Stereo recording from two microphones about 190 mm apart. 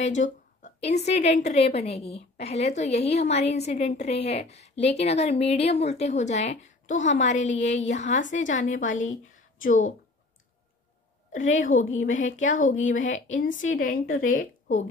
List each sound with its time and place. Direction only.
0.0 s a woman's voice: 40° left (ahead or behind)
11.3 s a woman's voice: 40° left (ahead or behind)